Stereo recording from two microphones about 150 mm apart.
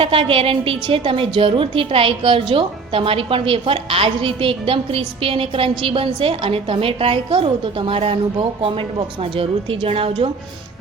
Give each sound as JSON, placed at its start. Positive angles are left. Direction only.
{"t": 0.0, "sound": "a woman's voice", "side_deg": -35}